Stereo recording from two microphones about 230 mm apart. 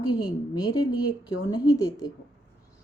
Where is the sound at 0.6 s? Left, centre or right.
Centre.